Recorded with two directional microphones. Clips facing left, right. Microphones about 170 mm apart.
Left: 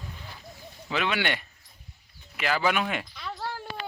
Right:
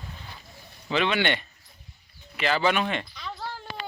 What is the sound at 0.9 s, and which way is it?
Speech, 5° left (ahead or behind).